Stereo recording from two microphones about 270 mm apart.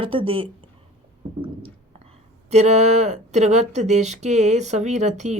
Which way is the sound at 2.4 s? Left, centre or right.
Right.